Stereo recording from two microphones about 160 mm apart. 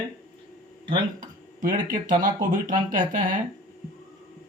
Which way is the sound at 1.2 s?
55° right (ahead or behind).